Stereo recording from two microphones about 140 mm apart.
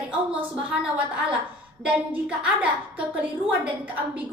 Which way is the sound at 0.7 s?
5° right (ahead or behind).